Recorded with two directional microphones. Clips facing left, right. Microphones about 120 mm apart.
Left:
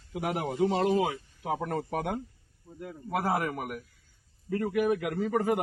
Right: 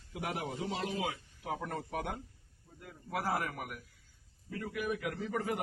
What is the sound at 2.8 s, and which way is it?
A man's voice, 65° left (ahead or behind).